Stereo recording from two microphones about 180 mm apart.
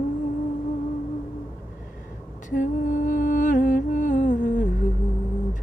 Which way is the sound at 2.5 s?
45° left (ahead or behind).